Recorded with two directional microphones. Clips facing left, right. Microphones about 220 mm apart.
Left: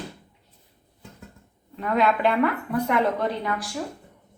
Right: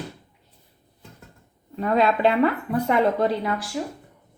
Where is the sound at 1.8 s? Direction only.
30° right (ahead or behind).